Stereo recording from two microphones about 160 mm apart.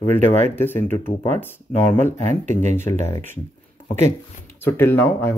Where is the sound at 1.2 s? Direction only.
15° left (ahead or behind).